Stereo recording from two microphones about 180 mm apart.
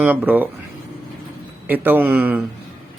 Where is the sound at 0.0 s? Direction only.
10° right (ahead or behind).